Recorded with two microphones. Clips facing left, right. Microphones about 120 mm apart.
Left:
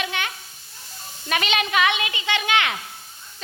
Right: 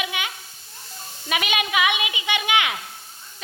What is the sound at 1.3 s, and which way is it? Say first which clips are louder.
Speech: left 1 dB; 10° right (ahead or behind).